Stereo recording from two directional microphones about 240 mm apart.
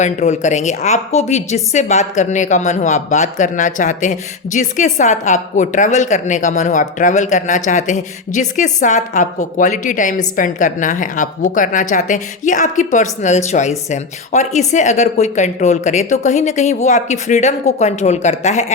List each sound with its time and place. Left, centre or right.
0.0 s a woman's voice: left